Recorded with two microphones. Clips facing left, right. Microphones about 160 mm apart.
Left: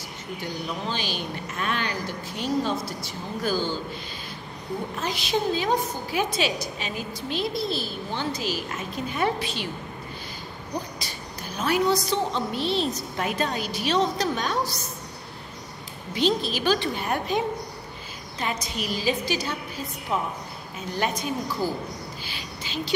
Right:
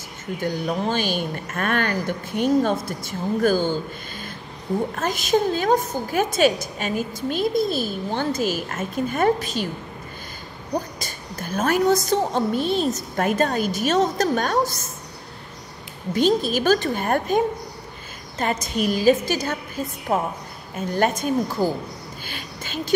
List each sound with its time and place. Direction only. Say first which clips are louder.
0.4 s a woman's voice: right 8 dB; 50° right (ahead or behind)
4.9 s a woman's voice: right 4 dB; 50° right (ahead or behind)
11.0 s a woman's voice: right 3 dB; 50° right (ahead or behind)
16.2 s a woman's voice: right 5 dB; 45° right (ahead or behind)
22.2 s a sound: right 2 dB; 50° right (ahead or behind)